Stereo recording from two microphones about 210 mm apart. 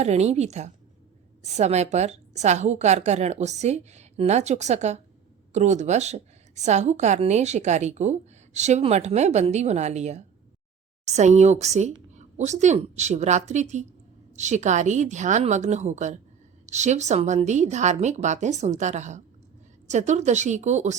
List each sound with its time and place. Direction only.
0.0 s a woman's voice: 30° right (ahead or behind)